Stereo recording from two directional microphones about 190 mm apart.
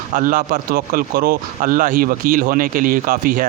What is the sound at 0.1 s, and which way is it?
Speech, 50° right (ahead or behind).